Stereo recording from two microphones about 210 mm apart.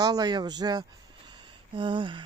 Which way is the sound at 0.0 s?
15° right (ahead or behind).